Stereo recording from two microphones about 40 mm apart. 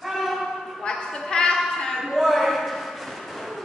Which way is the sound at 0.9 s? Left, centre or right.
Centre.